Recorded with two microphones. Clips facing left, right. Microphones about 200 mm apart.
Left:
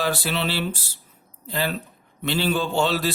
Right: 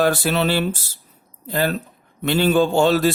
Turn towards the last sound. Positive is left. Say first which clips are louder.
# right 7 dB
turn(degrees=-45)  # may be behind; listen again after turning